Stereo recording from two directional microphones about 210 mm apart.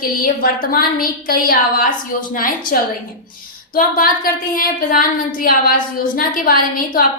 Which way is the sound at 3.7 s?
45° left (ahead or behind).